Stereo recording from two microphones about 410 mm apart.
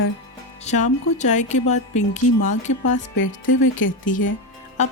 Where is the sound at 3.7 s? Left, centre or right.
Left.